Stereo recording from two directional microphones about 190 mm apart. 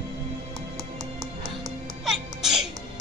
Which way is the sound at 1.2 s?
20° right (ahead or behind).